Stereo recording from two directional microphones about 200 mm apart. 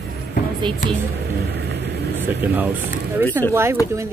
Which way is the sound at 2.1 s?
10° right (ahead or behind).